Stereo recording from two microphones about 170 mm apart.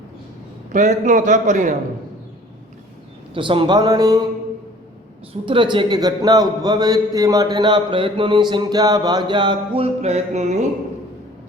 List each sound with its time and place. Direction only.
0.7 s a man's voice: 45° right (ahead or behind)
3.3 s a man's voice: 30° right (ahead or behind)
5.3 s a man's voice: 30° right (ahead or behind)